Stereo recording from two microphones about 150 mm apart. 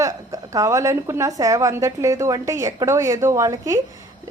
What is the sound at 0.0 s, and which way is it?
A woman's voice, 20° right (ahead or behind).